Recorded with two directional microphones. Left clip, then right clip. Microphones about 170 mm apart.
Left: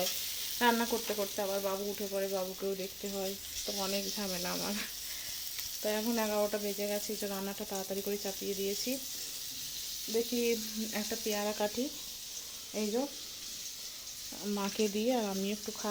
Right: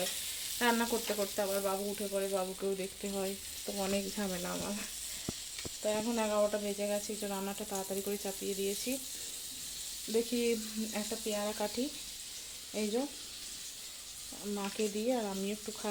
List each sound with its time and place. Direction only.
0.6 s frying: 5° left (ahead or behind)
3.7 s speech: 15° right (ahead or behind)
4.4 s frying: 5° left (ahead or behind)
5.8 s speech: 10° left (ahead or behind)
10.1 s frying: centre (ahead or behind)
10.9 s speech: 15° left (ahead or behind)
12.7 s frying: 5° left (ahead or behind)
14.5 s frying: 25° left (ahead or behind)